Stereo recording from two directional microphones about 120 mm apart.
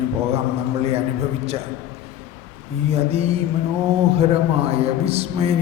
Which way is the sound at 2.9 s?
55° right (ahead or behind).